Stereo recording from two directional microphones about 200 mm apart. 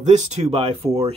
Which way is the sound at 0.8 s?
15° right (ahead or behind).